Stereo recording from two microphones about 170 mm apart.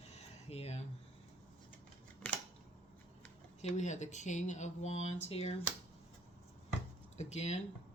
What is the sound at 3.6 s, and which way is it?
Speech, 45° left (ahead or behind).